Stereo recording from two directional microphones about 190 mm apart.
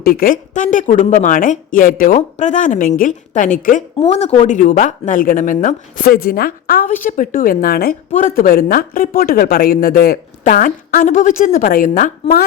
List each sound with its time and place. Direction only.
0.0 s a woman's voice: 50° left (ahead or behind)